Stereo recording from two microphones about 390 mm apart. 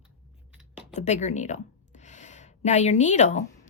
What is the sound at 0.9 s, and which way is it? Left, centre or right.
Speech, centre.